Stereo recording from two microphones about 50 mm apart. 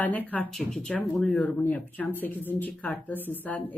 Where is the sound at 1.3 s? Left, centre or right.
Left.